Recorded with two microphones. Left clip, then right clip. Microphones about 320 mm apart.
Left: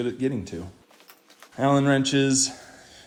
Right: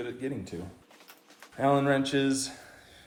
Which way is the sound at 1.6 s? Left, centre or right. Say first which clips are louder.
Left 4 dB; left.